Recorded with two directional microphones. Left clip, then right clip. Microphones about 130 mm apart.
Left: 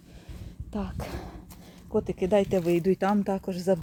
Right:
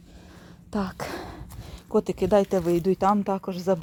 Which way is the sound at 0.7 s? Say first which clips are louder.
Right 6 dB; 40° right (ahead or behind).